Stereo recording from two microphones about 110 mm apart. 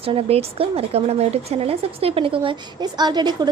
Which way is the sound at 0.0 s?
60° right (ahead or behind).